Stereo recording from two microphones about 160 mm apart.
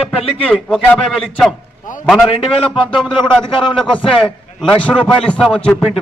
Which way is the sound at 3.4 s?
30° left (ahead or behind).